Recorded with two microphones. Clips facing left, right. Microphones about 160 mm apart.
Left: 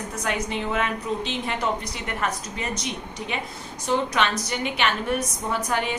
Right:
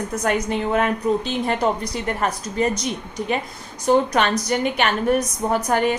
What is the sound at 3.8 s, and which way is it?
A woman's voice, 40° right (ahead or behind).